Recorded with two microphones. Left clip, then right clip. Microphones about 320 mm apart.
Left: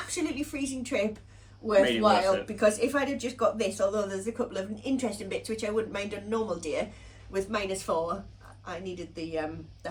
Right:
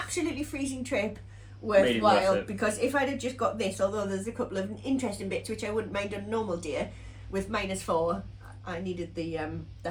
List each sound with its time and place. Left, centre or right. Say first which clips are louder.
0.1 s a woman's voice: even; centre